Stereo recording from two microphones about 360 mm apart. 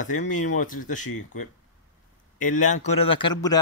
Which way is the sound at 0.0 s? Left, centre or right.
Left.